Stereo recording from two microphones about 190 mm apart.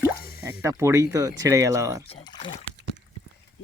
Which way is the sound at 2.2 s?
25° left (ahead or behind).